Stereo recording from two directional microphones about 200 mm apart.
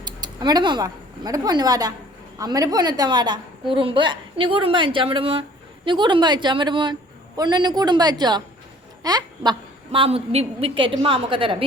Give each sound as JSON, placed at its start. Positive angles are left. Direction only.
{"t": 0.0, "sound": "a woman's voice", "side_deg": -20}